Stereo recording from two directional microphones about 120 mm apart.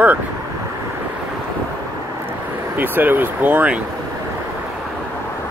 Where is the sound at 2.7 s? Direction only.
15° right (ahead or behind).